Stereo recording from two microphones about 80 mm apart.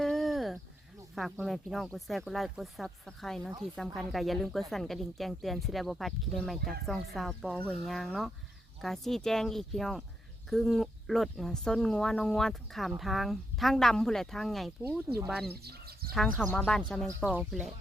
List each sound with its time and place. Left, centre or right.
0.0 s a sound: centre
1.1 s speech: centre
15.1 s speech: right
16.1 s speech: centre
16.6 s speech: centre